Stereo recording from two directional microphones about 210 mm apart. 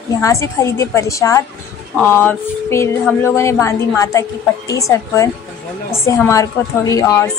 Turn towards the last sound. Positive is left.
turn(degrees=15)  # may be behind; listen again after turning